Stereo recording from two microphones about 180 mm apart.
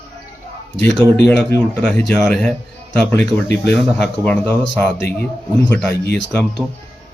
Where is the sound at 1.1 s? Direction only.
5° left (ahead or behind).